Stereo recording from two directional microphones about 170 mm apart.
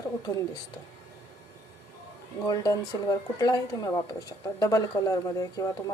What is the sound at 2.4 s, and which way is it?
Speech, 25° left (ahead or behind).